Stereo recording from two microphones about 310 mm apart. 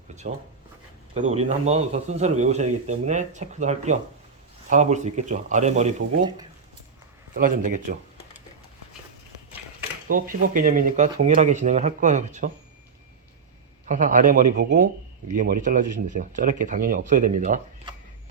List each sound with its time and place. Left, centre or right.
0.2 s a man's voice: right
10.1 s a man's voice: right
13.8 s a man's voice: right